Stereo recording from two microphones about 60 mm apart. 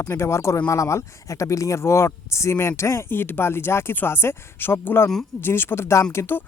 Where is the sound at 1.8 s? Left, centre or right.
Left.